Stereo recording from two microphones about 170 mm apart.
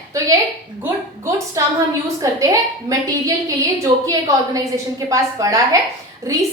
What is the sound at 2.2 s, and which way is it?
A woman's voice, 20° right (ahead or behind).